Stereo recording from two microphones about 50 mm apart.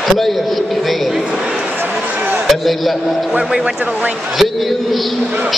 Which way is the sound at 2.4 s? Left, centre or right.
Centre.